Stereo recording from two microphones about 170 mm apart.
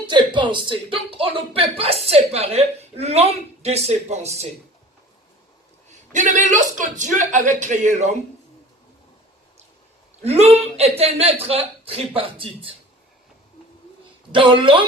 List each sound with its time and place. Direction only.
0.1 s speech: 30° right (ahead or behind)
6.1 s speech: 45° right (ahead or behind)
10.2 s speech: 40° right (ahead or behind)
14.3 s a woman's voice: 30° right (ahead or behind)